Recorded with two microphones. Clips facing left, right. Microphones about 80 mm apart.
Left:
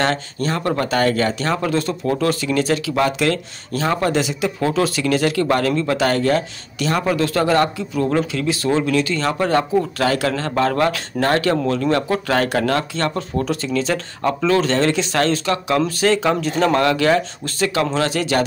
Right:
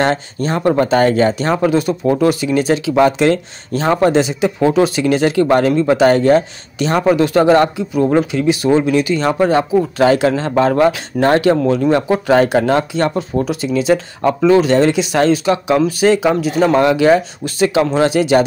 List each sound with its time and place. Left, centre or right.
0.0 s speech: right